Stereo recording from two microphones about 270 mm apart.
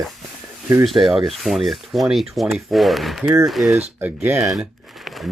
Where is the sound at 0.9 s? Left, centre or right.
Centre.